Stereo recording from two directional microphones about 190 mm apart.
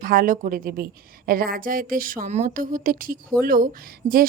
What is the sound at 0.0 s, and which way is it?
Speech, 50° right (ahead or behind).